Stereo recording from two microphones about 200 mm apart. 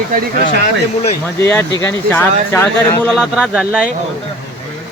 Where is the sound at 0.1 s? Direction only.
45° right (ahead or behind).